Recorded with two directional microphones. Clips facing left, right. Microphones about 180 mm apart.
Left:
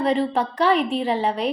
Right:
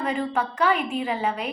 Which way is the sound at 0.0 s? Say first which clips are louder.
Left 5 dB; 35° left (ahead or behind).